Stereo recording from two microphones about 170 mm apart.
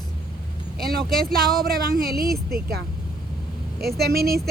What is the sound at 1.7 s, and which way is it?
A woman's voice, 60° right (ahead or behind).